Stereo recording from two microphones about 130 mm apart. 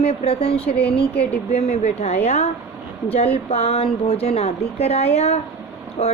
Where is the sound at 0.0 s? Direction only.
50° left (ahead or behind).